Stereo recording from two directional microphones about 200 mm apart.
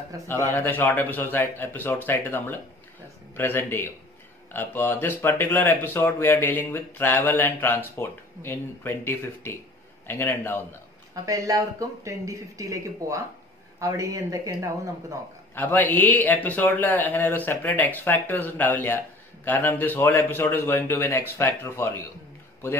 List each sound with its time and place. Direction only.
0.3 s speech: 10° left (ahead or behind)
11.2 s speech: 15° right (ahead or behind)
15.5 s speech: 10° left (ahead or behind)